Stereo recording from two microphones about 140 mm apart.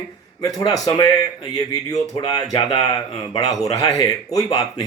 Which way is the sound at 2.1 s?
30° left (ahead or behind).